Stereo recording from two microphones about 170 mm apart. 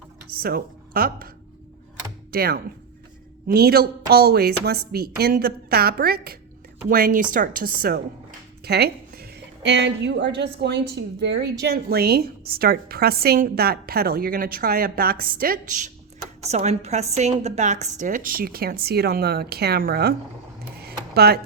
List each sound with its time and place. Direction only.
0.3 s speech: 60° right (ahead or behind)
2.3 s a woman's voice: 65° right (ahead or behind); by 11.5 s 85° right
11.6 s a woman's voice: 65° right (ahead or behind); by 15.9 s 50° right (ahead or behind)
16.6 s a woman's voice: 40° right (ahead or behind); by 20.1 s 65° right (ahead or behind)
20.7 s a sound: 65° right (ahead or behind)